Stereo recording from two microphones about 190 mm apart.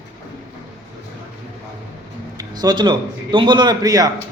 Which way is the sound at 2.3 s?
20° right (ahead or behind).